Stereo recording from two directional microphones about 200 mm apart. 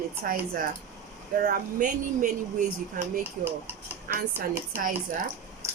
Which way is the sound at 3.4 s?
10° right (ahead or behind).